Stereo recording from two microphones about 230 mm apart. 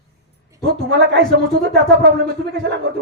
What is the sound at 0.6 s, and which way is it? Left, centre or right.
Speech, right.